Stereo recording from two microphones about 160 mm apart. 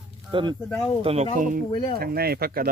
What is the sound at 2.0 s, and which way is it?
Speech, 70° right (ahead or behind).